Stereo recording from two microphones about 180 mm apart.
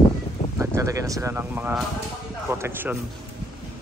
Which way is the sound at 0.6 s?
15° right (ahead or behind).